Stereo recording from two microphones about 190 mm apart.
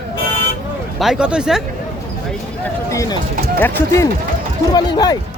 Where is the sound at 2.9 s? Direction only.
15° left (ahead or behind).